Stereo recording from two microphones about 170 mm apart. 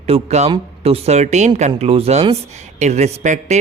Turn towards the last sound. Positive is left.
turn(degrees=-45)  # may be behind; listen again after turning